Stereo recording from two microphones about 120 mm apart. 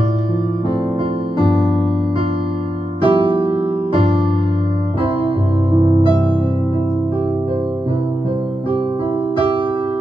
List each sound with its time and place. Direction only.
3.0 s music: 45° right (ahead or behind)
5.8 s music: 55° right (ahead or behind)